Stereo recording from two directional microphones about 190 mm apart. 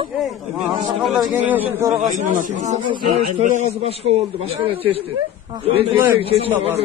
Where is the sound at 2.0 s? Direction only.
40° right (ahead or behind).